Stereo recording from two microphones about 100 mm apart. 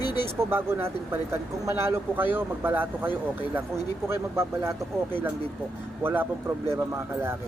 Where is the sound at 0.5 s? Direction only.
25° right (ahead or behind).